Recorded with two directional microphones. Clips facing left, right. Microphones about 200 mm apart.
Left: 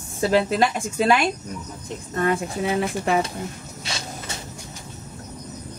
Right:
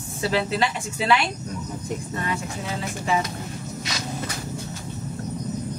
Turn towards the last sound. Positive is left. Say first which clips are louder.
# right 3 dB
turn(degrees=25)  # may be behind; listen again after turning